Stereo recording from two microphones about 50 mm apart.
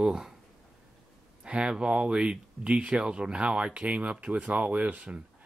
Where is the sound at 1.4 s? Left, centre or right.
Right.